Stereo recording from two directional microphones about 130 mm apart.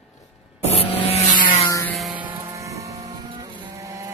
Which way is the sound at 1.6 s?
25° left (ahead or behind).